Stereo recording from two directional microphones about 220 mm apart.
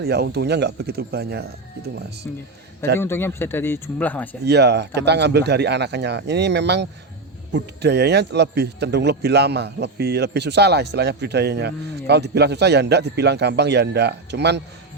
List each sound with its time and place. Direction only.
0.0 s speech: 50° right (ahead or behind)
2.3 s a man's voice: 5° left (ahead or behind)
4.4 s speech: 50° right (ahead or behind)